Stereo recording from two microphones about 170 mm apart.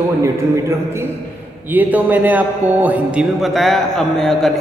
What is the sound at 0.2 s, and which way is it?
A woman's voice, 15° right (ahead or behind).